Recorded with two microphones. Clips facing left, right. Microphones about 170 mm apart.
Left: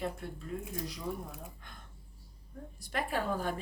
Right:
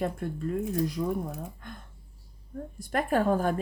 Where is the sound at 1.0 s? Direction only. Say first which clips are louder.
Right 6 dB; 70° right (ahead or behind).